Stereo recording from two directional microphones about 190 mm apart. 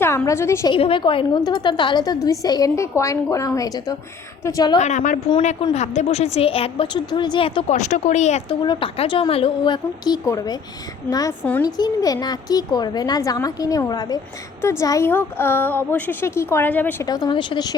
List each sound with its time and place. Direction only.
0.0 s a woman's voice: 15° left (ahead or behind)
0.7 s a woman's voice: 25° left (ahead or behind)
4.8 s a woman's voice: 40° left (ahead or behind)
8.6 s a woman's voice: 25° left (ahead or behind)